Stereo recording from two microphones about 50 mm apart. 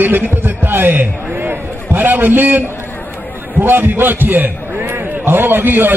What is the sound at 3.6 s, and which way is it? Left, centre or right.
A man's voice, right.